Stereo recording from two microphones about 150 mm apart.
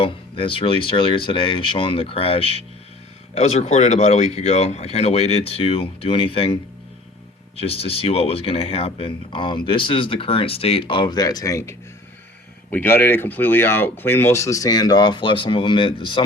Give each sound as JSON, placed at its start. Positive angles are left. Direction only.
{"t": 0.0, "sound": "speech", "side_deg": 35}